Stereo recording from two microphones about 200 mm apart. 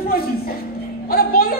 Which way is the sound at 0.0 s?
50° left (ahead or behind).